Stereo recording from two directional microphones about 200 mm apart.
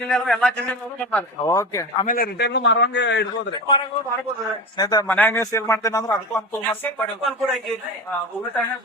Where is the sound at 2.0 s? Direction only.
45° left (ahead or behind).